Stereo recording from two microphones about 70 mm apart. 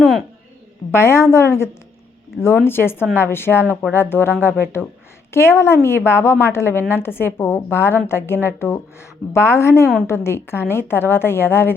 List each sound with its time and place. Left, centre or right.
0.9 s a woman's voice: left